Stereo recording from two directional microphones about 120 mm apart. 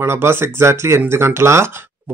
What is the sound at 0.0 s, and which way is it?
Speech, 20° right (ahead or behind).